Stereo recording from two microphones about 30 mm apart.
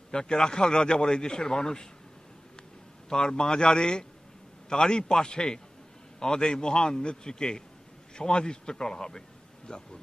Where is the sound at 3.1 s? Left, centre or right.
Left.